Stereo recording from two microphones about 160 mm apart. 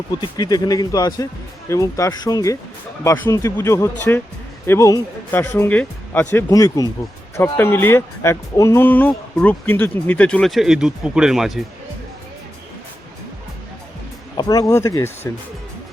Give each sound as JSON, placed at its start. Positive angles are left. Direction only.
{"t": 0.2, "sound": "speech", "side_deg": 25}
{"t": 14.3, "sound": "speech", "side_deg": 25}